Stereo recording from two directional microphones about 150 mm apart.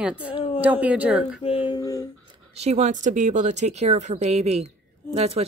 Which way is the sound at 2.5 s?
45° right (ahead or behind).